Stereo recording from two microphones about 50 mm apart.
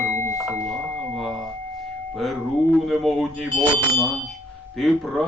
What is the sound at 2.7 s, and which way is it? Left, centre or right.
Speech, centre.